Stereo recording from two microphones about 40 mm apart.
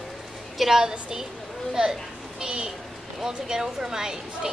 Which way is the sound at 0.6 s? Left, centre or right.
Centre.